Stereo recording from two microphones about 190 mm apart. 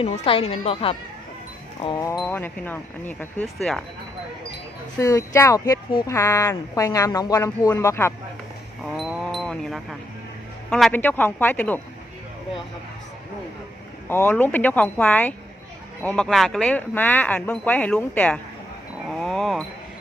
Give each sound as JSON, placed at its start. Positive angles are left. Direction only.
{"t": 0.0, "sound": "speech", "side_deg": 30}
{"t": 4.9, "sound": "speech", "side_deg": 15}
{"t": 8.8, "sound": "wild animals", "side_deg": 0}
{"t": 10.7, "sound": "speech", "side_deg": 0}
{"t": 14.1, "sound": "speech", "side_deg": 10}